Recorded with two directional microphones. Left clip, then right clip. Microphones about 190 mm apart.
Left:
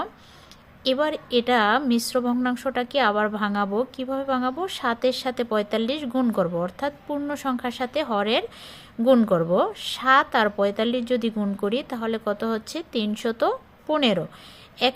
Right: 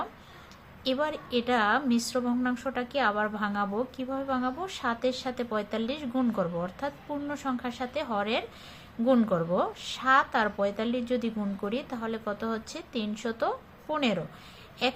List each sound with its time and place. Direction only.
0.9 s a woman's voice: 40° left (ahead or behind)